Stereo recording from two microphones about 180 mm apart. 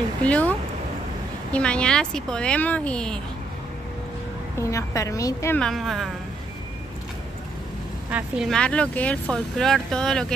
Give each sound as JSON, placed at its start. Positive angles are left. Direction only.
{"t": 0.2, "sound": "a woman's voice", "side_deg": 10}
{"t": 4.6, "sound": "a woman's voice", "side_deg": 15}
{"t": 5.6, "sound": "speech", "side_deg": 0}
{"t": 8.1, "sound": "speech", "side_deg": -5}